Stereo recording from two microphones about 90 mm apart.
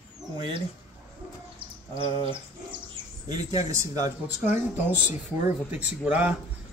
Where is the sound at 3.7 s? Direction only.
35° right (ahead or behind).